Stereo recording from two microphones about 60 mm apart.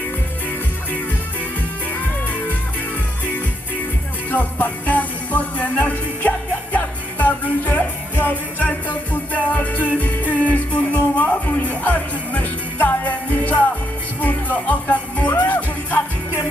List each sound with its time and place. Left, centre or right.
1.9 s music: left
4.3 s music: left